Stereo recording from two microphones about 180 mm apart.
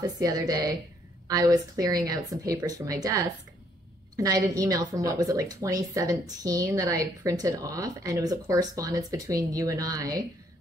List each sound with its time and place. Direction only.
0.0 s speech: 20° right (ahead or behind)